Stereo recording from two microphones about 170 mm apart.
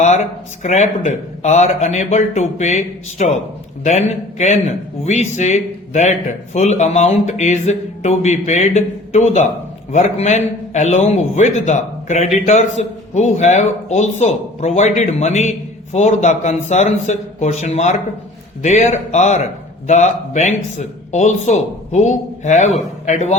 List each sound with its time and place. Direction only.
0.6 s a man's voice: 40° left (ahead or behind)